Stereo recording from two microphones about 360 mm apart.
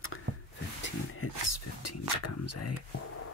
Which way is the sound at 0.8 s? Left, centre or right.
Left.